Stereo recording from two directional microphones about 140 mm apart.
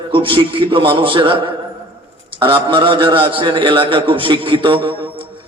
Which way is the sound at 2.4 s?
35° right (ahead or behind).